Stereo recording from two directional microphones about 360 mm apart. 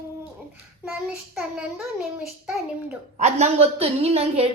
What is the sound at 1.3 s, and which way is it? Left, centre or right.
A child's voice, centre.